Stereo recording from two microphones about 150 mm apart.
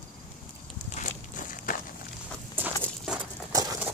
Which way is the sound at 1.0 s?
60° left (ahead or behind).